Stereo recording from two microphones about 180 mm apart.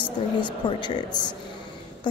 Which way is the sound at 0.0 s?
25° left (ahead or behind).